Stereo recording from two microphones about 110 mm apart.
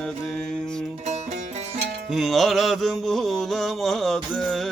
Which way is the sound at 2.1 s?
Centre (ahead or behind).